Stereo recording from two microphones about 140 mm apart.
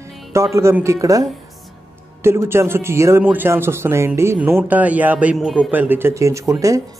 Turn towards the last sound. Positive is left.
turn(degrees=-25)  # may be behind; listen again after turning